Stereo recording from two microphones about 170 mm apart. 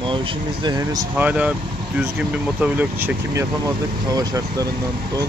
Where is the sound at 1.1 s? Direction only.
5° right (ahead or behind).